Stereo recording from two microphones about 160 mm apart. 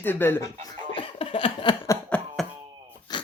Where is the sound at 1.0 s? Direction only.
35° left (ahead or behind).